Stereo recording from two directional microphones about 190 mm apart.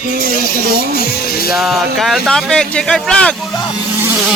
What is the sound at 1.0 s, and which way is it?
Speech, 55° left (ahead or behind).